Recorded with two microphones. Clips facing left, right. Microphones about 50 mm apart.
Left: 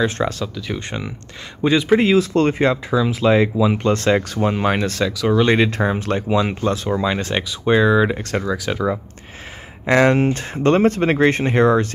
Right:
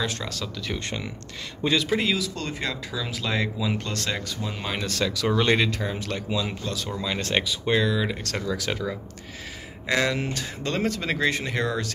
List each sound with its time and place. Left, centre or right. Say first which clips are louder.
0.0 s speech: left 10 dB; left
0.6 s speech: left 4 dB; centre
1.9 s speech: left 10 dB; left
4.3 s speech: left 12 dB; left
5.0 s speech: left 5 dB; centre
5.7 s speech: left 9 dB; left
7.2 s speech: left 3 dB; centre
7.6 s speech: left 10 dB; centre
7.9 s speech: left 10 dB; left
9.8 s speech: left 10 dB; left